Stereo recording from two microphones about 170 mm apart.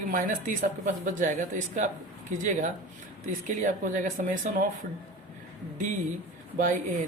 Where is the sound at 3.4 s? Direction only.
45° right (ahead or behind).